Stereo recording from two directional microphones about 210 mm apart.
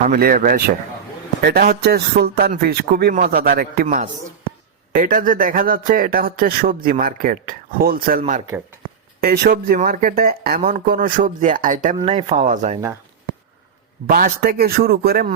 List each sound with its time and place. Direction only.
0.0 s speech: 45° right (ahead or behind)
8.4 s speech: 10° right (ahead or behind)
9.2 s speech: 50° right (ahead or behind)
14.1 s speech: 45° right (ahead or behind)